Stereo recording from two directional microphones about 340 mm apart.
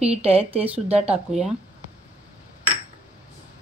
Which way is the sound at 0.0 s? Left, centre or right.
Centre.